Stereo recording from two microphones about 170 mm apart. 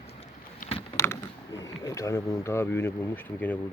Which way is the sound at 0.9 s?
15° left (ahead or behind).